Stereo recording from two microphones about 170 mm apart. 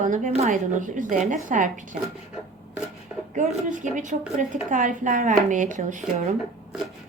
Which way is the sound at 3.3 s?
45° right (ahead or behind).